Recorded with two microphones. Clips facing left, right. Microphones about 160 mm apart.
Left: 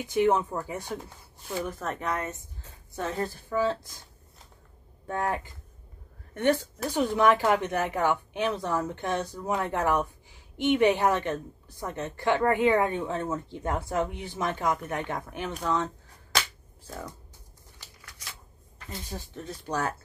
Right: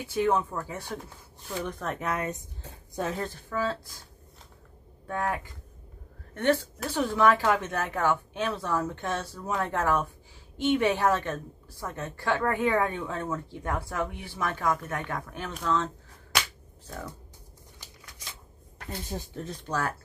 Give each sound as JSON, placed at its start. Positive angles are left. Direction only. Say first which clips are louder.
{"t": 0.0, "sound": "speech", "louder": "left 2 dB", "side_deg": 15}
{"t": 1.6, "sound": "a woman's voice", "louder": "even", "side_deg": 0}
{"t": 3.4, "sound": "speech", "louder": "left 4 dB", "side_deg": 20}
{"t": 5.0, "sound": "speech", "louder": "left 1 dB", "side_deg": 25}
{"t": 6.3, "sound": "speech", "louder": "even", "side_deg": 15}
{"t": 19.1, "sound": "speech", "louder": "right 3 dB", "side_deg": -25}